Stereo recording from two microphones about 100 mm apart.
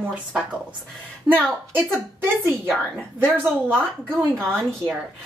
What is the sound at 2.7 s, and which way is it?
Speech, 5° left (ahead or behind).